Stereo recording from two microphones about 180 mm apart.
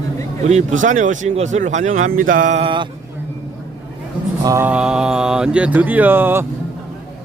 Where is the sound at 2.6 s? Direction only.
25° right (ahead or behind).